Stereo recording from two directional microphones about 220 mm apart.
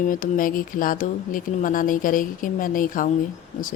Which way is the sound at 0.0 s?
40° left (ahead or behind).